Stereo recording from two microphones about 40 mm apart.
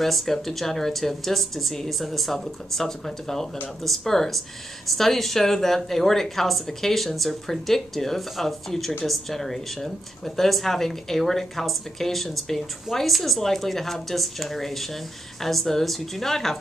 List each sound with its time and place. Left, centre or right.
0.0 s speech: centre